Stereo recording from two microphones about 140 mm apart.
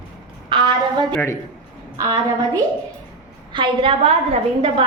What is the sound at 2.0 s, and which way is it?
Speech, 25° right (ahead or behind).